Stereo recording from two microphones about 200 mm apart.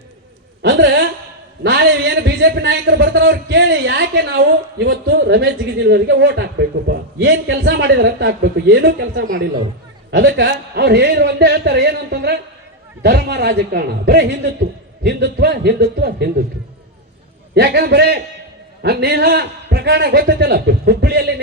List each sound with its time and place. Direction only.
0.6 s a woman's voice: 65° right (ahead or behind)
17.5 s a man's voice: 55° right (ahead or behind)